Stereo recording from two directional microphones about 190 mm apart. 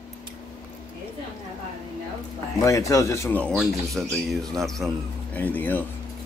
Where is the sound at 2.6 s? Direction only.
15° left (ahead or behind).